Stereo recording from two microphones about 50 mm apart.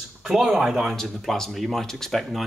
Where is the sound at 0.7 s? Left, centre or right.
Centre.